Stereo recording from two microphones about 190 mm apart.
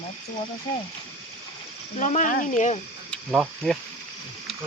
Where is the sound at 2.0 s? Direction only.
40° left (ahead or behind).